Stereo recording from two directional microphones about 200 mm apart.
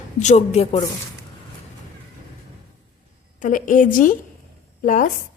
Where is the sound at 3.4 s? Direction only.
40° left (ahead or behind).